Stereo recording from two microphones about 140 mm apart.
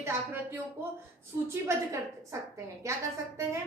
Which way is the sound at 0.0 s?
15° right (ahead or behind).